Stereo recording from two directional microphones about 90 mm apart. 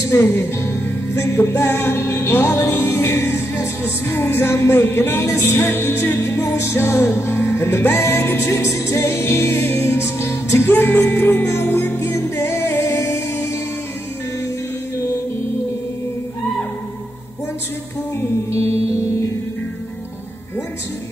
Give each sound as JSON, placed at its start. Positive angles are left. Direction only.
{"t": 0.0, "sound": "music", "side_deg": 30}
{"t": 18.6, "sound": "music", "side_deg": -90}